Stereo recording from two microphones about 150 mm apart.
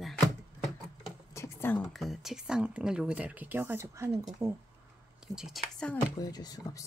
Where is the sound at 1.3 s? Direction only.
15° left (ahead or behind).